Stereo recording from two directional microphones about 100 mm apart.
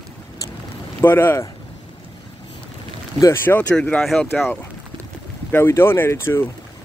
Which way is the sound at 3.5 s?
15° left (ahead or behind).